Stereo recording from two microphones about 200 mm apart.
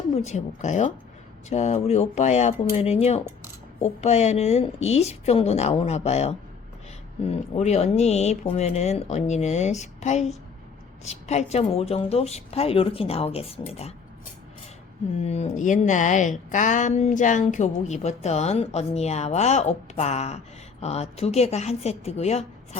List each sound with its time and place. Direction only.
0.2 s speech: 35° left (ahead or behind)
15.2 s speech: 35° left (ahead or behind)